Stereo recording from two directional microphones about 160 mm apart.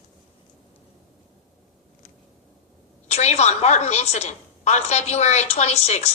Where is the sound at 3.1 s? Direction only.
45° left (ahead or behind).